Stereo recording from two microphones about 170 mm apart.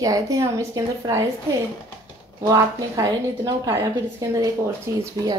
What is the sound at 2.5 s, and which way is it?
A woman's voice, 20° right (ahead or behind).